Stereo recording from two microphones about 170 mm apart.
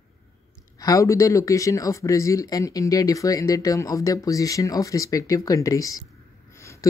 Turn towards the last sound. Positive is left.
turn(degrees=15)  # may be behind; listen again after turning